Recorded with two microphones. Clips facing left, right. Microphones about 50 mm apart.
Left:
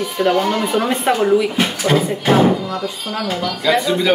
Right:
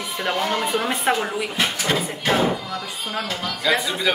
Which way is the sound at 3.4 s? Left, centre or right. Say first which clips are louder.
Left 5 dB; centre.